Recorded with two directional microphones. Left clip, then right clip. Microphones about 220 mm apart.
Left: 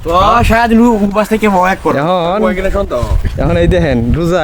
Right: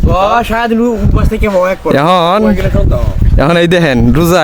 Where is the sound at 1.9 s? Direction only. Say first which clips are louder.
Right 4 dB; 40° right (ahead or behind).